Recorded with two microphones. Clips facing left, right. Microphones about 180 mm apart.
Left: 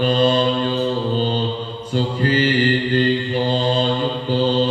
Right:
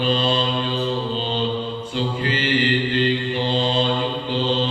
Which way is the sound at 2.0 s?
40° left (ahead or behind).